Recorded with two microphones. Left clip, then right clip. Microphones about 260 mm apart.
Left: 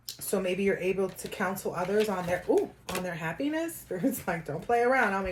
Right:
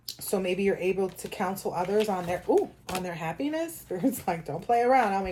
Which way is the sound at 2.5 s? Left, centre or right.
Right.